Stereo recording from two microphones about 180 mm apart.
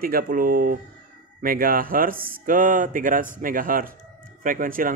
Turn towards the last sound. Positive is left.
turn(degrees=-50)  # may be behind; listen again after turning